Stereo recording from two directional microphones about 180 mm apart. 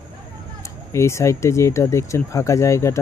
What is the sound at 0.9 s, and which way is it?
Speech, 15° left (ahead or behind).